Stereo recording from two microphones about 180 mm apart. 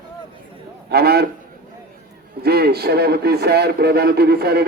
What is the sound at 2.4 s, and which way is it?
A man's voice, 60° right (ahead or behind).